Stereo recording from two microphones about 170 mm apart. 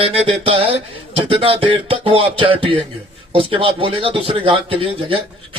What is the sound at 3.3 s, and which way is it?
Speech, 30° right (ahead or behind).